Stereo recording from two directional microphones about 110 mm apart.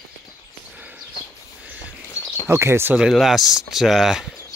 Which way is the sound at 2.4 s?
20° right (ahead or behind).